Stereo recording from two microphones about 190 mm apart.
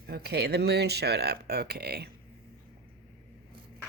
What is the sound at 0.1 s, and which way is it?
Speech, 55° right (ahead or behind).